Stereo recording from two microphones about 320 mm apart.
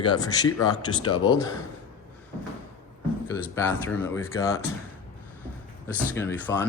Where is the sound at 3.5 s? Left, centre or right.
Centre.